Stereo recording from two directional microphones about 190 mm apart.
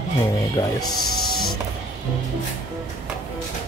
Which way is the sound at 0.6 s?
25° left (ahead or behind).